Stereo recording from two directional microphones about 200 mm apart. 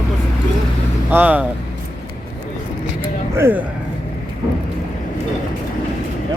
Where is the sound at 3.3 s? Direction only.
10° right (ahead or behind).